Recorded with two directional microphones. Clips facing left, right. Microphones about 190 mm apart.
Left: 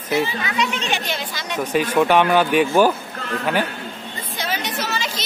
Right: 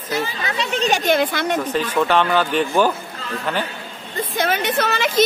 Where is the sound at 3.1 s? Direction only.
60° left (ahead or behind).